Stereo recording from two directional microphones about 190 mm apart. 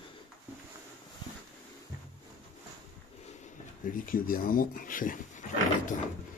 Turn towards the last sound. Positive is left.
turn(degrees=40)  # may be behind; listen again after turning